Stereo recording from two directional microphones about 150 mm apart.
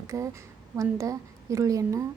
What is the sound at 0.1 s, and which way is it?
A woman's voice, 20° right (ahead or behind).